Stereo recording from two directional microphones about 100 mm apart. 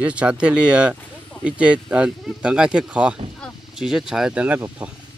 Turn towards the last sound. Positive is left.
turn(degrees=-15)  # may be behind; listen again after turning